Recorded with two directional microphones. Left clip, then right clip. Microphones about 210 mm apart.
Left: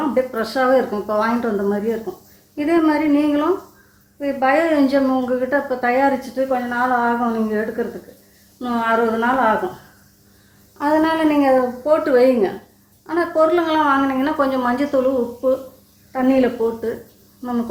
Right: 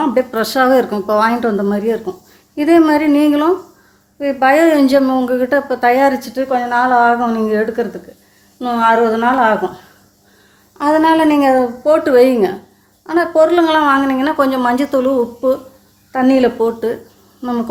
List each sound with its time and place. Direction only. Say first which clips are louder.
0.1 s a woman's voice: right 5 dB; 55° right (ahead or behind)
10.8 s a woman's voice: right 6 dB; 50° right (ahead or behind)